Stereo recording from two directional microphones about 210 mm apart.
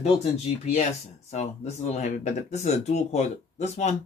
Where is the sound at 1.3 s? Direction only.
35° left (ahead or behind).